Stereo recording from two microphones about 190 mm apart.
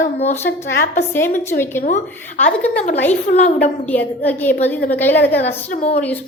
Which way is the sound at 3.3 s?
45° left (ahead or behind).